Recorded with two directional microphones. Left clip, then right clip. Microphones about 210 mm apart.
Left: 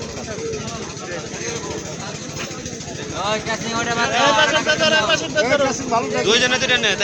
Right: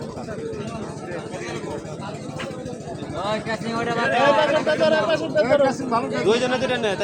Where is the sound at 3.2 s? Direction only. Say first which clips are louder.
Left 3 dB; 55° right (ahead or behind).